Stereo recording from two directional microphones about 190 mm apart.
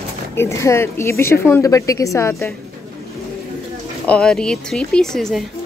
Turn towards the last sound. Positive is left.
turn(degrees=0)  # may be behind; listen again after turning